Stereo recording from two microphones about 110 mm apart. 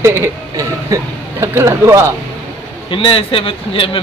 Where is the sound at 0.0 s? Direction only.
25° right (ahead or behind).